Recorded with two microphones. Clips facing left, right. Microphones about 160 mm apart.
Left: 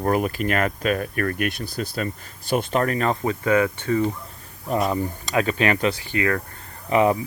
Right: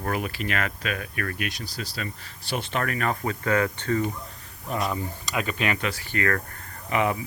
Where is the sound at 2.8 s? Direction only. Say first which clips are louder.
Left 5 dB; 30° left (ahead or behind); by 4.1 s 15° left (ahead or behind).